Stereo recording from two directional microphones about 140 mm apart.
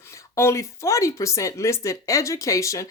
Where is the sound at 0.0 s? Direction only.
20° left (ahead or behind).